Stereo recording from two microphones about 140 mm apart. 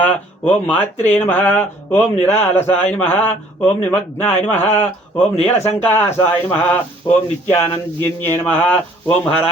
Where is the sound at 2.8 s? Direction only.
10° left (ahead or behind).